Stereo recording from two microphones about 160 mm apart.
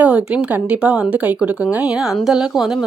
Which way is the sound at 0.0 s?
10° right (ahead or behind).